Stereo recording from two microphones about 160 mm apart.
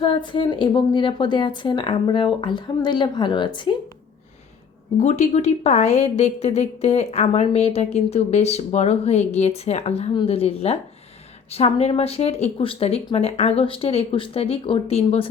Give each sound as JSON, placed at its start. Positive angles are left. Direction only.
{"t": 0.0, "sound": "speech", "side_deg": 30}
{"t": 4.9, "sound": "a woman's voice", "side_deg": 45}